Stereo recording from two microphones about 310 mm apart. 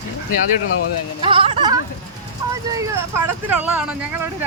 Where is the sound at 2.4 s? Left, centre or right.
Centre.